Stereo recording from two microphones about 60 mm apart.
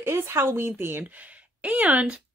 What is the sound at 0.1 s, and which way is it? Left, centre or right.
Speech, right.